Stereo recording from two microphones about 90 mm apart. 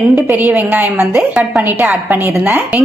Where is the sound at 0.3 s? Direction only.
20° right (ahead or behind).